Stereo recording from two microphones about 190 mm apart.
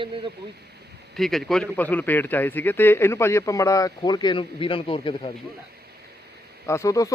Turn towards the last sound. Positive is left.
turn(degrees=15)  # may be behind; listen again after turning